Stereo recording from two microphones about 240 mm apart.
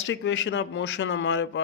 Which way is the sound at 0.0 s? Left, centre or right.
Left.